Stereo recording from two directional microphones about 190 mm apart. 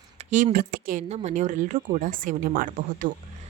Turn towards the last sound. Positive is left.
turn(degrees=-40)  # may be behind; listen again after turning